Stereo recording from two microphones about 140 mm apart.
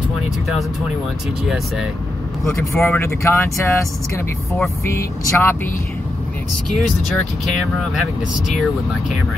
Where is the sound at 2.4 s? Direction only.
15° left (ahead or behind).